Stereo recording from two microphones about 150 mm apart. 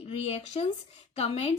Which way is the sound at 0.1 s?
45° left (ahead or behind).